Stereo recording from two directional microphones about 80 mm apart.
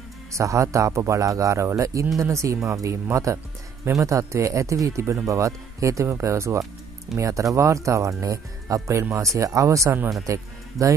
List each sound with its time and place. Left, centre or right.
0.3 s speech: right